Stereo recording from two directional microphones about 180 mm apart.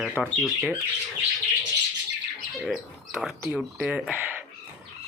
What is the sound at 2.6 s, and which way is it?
Bird, centre (ahead or behind).